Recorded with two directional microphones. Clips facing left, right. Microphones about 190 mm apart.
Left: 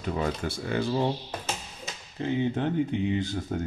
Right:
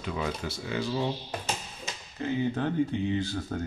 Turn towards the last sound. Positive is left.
turn(degrees=20)  # may be behind; listen again after turning